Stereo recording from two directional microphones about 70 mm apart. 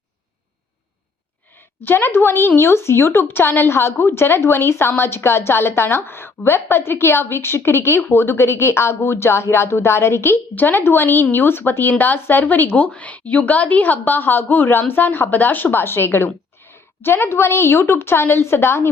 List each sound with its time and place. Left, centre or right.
1.8 s speech: left
10.3 s speech: left